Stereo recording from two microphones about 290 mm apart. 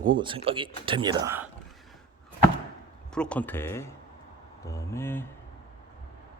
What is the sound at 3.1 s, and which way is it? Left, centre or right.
Speech, centre.